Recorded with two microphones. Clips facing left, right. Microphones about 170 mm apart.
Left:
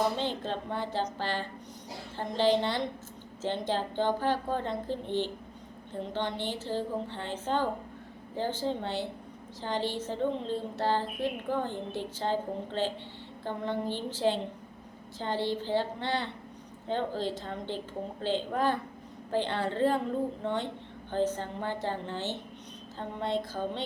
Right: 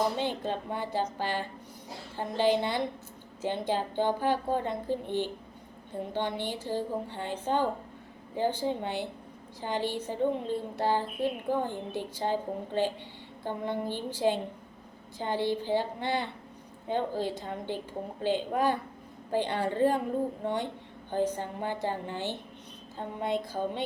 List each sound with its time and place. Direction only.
0.2 s speech: 15° right (ahead or behind)